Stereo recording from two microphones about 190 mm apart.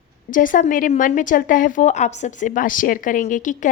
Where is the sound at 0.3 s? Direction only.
45° left (ahead or behind).